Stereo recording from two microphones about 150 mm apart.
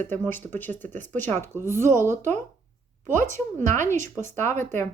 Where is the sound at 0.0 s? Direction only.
15° left (ahead or behind).